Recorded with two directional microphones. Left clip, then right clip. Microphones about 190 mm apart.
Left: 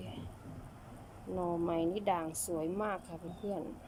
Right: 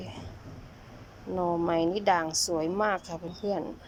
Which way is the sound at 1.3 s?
5° right (ahead or behind).